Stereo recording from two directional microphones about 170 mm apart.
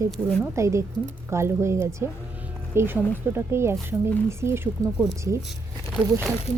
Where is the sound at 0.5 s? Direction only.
15° right (ahead or behind).